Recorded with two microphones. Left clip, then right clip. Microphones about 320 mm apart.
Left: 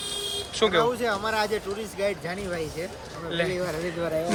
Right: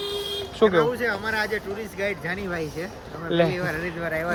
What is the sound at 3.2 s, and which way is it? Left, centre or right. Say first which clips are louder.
Speech: right 6 dB; centre.